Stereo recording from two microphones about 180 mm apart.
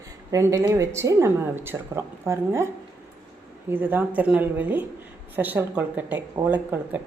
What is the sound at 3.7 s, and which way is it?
Speech, 10° right (ahead or behind).